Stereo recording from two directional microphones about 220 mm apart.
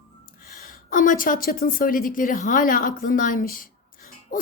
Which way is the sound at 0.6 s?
40° left (ahead or behind).